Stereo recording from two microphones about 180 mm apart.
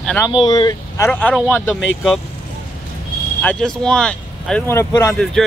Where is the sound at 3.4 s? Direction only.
5° left (ahead or behind).